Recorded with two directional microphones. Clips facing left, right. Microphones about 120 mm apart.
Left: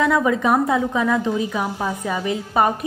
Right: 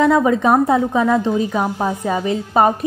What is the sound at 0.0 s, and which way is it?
A woman's voice, 30° right (ahead or behind).